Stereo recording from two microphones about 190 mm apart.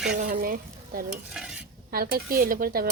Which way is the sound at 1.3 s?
5° right (ahead or behind).